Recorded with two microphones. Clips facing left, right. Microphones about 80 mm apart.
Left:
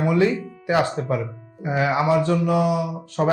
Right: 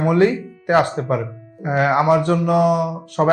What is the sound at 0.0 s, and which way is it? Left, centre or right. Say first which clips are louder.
Speech: right 4 dB; right.